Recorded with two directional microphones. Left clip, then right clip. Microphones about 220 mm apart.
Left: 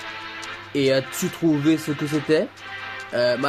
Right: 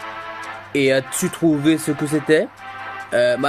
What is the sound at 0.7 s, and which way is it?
Speech, 15° right (ahead or behind).